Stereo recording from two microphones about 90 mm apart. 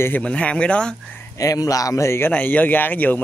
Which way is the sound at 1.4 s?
40° left (ahead or behind).